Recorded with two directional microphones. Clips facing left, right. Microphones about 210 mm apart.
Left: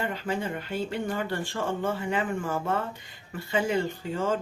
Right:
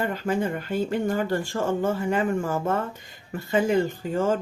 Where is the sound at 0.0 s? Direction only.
45° right (ahead or behind).